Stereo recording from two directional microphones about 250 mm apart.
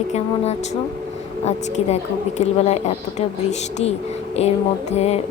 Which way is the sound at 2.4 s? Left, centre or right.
Left.